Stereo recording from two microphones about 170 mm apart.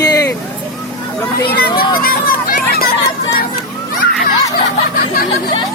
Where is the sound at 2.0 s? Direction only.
60° left (ahead or behind).